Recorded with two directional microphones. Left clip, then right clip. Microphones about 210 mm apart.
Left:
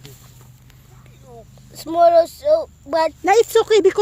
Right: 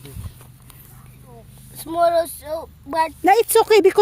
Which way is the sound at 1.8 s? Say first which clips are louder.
Left 5 dB; 30° left (ahead or behind).